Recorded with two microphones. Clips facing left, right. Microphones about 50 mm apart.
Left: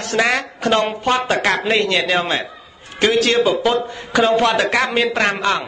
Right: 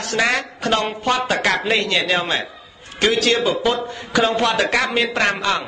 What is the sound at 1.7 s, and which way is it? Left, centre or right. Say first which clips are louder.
Speech: left 2 dB; left.